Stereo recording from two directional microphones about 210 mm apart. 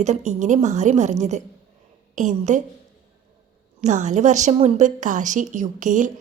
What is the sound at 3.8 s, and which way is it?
A woman's voice, 35° right (ahead or behind).